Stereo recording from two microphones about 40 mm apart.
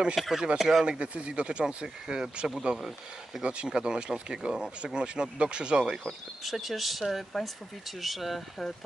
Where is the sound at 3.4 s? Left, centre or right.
Right.